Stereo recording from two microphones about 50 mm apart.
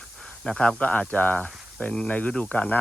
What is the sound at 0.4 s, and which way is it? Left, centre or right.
Speech, centre.